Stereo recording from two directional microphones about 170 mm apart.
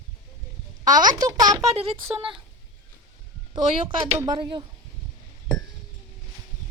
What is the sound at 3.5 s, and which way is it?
A woman's voice, 30° right (ahead or behind).